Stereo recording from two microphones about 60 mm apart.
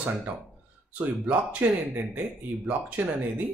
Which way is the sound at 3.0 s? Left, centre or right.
Right.